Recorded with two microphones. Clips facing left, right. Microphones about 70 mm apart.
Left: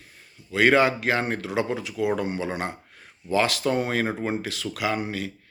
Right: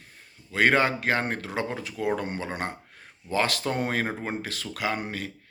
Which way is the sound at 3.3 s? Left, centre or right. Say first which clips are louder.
Left 4 dB; right.